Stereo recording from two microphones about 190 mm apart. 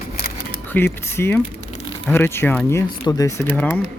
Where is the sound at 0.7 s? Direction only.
10° left (ahead or behind).